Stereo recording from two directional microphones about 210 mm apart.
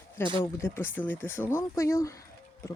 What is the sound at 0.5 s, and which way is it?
Speech, 10° left (ahead or behind).